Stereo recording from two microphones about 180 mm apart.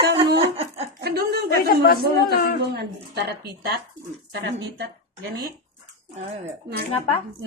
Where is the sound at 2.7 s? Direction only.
60° right (ahead or behind).